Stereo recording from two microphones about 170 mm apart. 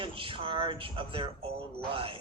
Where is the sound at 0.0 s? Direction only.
30° right (ahead or behind).